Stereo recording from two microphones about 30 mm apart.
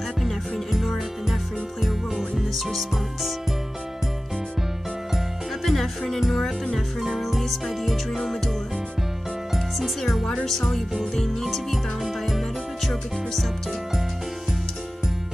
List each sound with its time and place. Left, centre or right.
0.2 s music: centre
5.6 s music: centre
6.3 s music: centre
7.0 s music: centre
9.5 s music: centre
10.4 s music: centre
11.7 s music: centre